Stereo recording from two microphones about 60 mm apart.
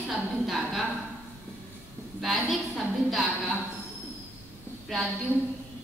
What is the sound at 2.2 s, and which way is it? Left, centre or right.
A woman's voice, centre.